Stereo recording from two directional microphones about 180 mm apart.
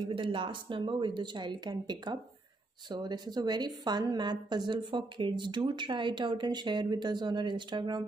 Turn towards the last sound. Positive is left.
turn(degrees=-25)  # may be behind; listen again after turning